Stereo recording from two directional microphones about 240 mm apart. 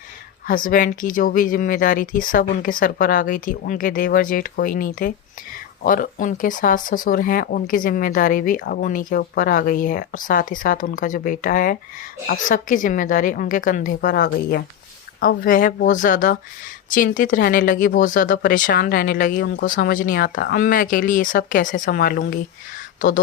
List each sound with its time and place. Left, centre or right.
0.4 s speech: left